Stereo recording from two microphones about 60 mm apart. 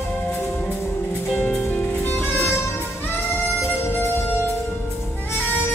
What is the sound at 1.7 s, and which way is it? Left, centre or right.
Music, left.